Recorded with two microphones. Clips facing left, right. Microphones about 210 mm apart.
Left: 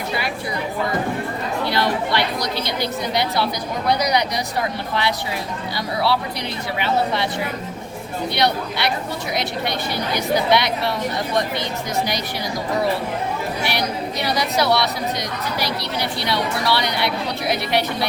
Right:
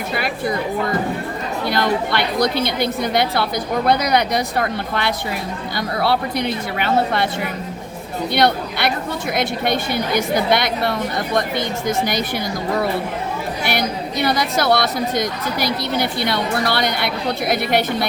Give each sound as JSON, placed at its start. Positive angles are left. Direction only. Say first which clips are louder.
{"t": 1.6, "sound": "a woman's voice", "louder": "right 3 dB", "side_deg": -50}
{"t": 8.4, "sound": "a woman's voice", "louder": "right 4 dB", "side_deg": -50}
{"t": 14.3, "sound": "a woman's voice", "louder": "right 2 dB", "side_deg": -50}